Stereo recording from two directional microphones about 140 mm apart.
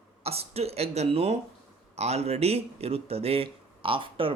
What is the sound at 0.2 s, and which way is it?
Speech, 45° right (ahead or behind).